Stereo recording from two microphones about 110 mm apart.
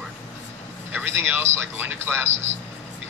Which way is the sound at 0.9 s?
20° right (ahead or behind).